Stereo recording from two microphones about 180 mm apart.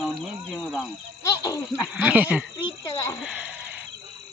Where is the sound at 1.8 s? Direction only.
10° right (ahead or behind).